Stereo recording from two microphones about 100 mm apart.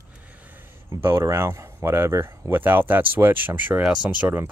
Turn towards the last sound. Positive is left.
turn(degrees=-20)  # may be behind; listen again after turning